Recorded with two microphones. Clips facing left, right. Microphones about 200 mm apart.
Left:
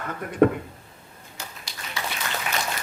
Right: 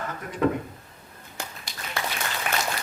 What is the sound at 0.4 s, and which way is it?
Speech, 55° left (ahead or behind).